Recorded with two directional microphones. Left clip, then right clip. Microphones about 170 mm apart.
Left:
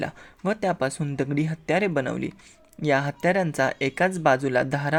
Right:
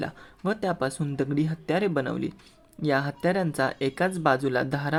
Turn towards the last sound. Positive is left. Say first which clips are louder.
# left 3 dB
turn(degrees=25)  # may be behind; listen again after turning